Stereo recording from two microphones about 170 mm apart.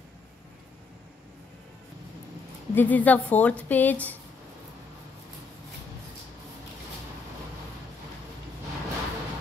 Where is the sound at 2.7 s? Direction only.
10° left (ahead or behind).